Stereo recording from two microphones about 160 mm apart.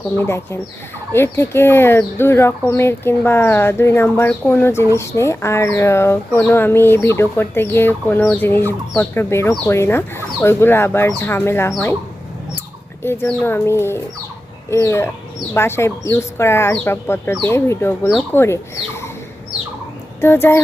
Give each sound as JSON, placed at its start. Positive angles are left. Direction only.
{"t": 0.2, "sound": "speech", "side_deg": 15}
{"t": 13.2, "sound": "speech", "side_deg": 15}
{"t": 20.2, "sound": "speech", "side_deg": 15}